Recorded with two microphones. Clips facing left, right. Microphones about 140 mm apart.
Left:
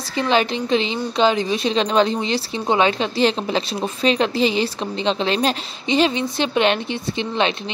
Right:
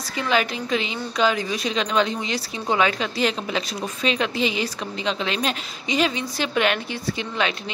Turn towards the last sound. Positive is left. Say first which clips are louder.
# left 4 dB
turn(degrees=25)  # may be behind; listen again after turning